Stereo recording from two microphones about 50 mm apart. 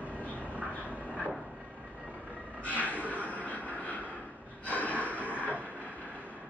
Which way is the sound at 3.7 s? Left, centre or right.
Left.